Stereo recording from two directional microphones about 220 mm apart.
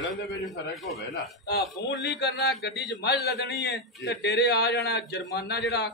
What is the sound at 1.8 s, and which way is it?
A man's voice, 50° left (ahead or behind).